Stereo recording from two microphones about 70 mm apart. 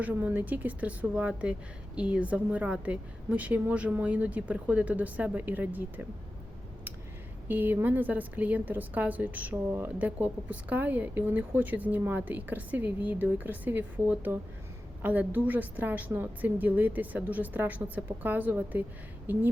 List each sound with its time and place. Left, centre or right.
0.0 s a woman's voice: right
7.4 s a woman's voice: right
9.7 s speech: right
10.2 s a woman's voice: right